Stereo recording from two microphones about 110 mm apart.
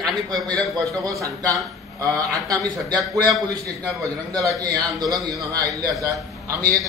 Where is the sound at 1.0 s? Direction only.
30° right (ahead or behind).